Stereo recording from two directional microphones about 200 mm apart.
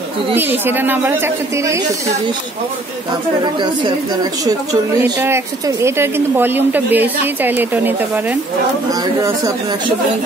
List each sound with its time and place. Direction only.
0.3 s a woman's voice: 10° right (ahead or behind)
5.2 s a woman's voice: 15° right (ahead or behind)